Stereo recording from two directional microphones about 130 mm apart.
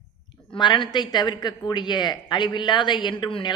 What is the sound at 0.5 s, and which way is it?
Speech, 35° left (ahead or behind).